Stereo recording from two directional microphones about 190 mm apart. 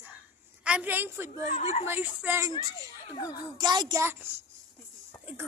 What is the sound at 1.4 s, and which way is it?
Speech, 35° left (ahead or behind).